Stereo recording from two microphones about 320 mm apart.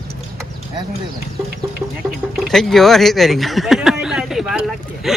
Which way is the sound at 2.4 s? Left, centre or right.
Centre.